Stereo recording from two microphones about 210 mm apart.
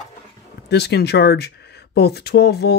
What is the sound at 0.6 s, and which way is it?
Speech, 50° left (ahead or behind).